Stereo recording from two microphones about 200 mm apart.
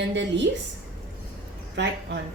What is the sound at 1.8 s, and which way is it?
Speech, 60° right (ahead or behind).